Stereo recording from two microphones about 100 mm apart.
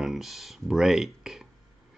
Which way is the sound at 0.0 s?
5° right (ahead or behind).